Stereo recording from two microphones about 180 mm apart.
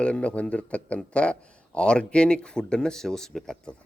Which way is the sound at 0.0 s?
5° left (ahead or behind).